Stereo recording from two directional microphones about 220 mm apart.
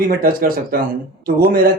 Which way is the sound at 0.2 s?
40° right (ahead or behind).